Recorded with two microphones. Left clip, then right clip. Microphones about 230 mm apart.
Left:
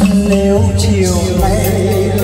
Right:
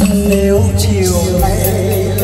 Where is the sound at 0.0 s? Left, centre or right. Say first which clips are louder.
Even; centre.